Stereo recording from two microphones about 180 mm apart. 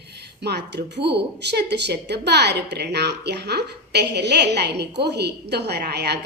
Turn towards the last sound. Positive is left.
turn(degrees=-65)  # may be behind; listen again after turning